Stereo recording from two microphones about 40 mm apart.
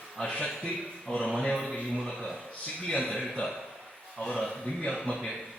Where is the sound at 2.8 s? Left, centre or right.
Left.